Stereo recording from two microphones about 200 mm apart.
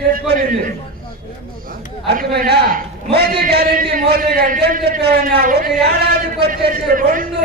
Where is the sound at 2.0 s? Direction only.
55° right (ahead or behind).